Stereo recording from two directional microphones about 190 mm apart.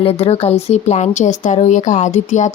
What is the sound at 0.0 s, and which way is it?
Speech, 30° left (ahead or behind).